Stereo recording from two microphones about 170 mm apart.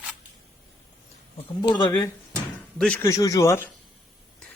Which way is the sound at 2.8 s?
5° left (ahead or behind).